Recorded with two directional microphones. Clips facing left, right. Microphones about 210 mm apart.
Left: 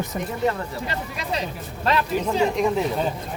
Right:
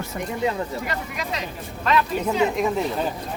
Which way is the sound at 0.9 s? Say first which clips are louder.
Left 1 dB; 30° left (ahead or behind).